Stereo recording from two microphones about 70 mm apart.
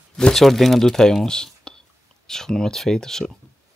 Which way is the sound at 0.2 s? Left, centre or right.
Centre.